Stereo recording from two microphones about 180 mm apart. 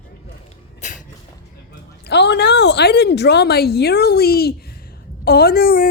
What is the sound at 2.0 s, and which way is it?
A woman's voice, 70° left (ahead or behind).